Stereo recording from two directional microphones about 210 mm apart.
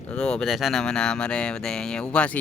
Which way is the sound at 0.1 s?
5° left (ahead or behind).